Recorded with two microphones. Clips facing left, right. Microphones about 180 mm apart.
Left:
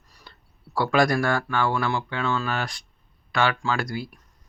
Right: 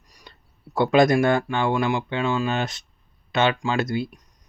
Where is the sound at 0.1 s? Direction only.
20° right (ahead or behind).